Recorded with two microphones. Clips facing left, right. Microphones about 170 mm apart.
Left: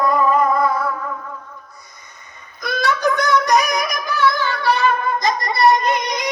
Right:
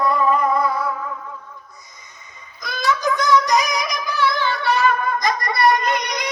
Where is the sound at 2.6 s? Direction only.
60° left (ahead or behind).